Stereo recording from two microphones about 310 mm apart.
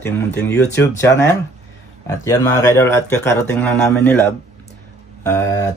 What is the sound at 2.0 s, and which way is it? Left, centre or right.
Speech, centre.